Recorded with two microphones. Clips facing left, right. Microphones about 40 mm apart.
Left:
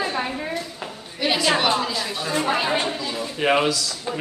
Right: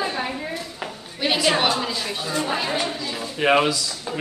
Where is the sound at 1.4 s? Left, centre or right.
Centre.